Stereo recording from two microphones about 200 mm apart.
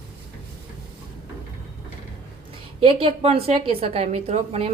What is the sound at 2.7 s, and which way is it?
A woman's voice, 25° right (ahead or behind).